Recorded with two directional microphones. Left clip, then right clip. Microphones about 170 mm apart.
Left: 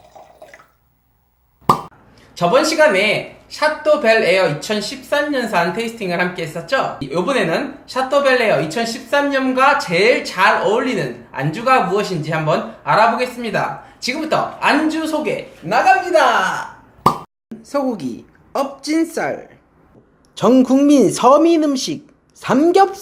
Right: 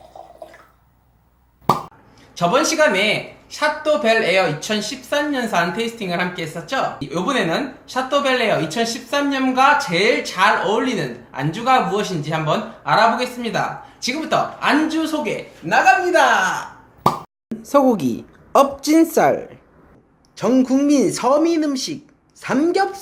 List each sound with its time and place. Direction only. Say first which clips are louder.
2.3 s speech: left 3 dB; centre (ahead or behind)
17.6 s a woman's voice: right 5 dB; 15° right (ahead or behind)
20.3 s speech: left 4 dB; 10° left (ahead or behind)